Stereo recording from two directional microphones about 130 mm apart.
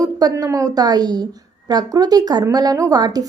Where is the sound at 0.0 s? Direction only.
30° right (ahead or behind).